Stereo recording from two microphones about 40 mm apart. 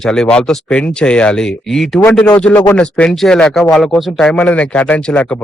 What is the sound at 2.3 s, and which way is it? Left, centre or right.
Speech, left.